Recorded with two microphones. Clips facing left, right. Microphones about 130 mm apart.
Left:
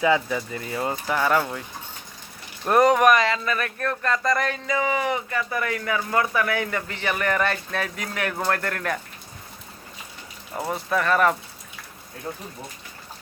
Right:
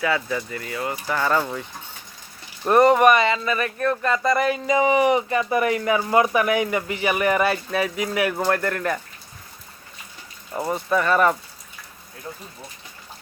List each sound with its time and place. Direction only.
0.0 s speech: 15° left (ahead or behind)
1.1 s speech: 5° left (ahead or behind)
2.6 s speech: centre (ahead or behind)
4.6 s speech: 20° right (ahead or behind); by 9.0 s centre (ahead or behind)
10.5 s speech: centre (ahead or behind)